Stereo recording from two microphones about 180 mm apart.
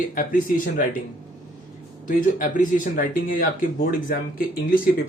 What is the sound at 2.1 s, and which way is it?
Speech, 50° left (ahead or behind).